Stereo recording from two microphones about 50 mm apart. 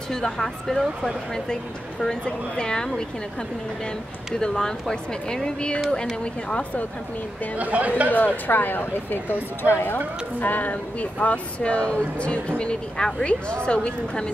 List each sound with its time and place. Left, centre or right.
0.1 s speech: centre
4.4 s speech: centre
7.5 s speech: right
8.1 s speech: left
10.4 s speech: left; by 14.3 s centre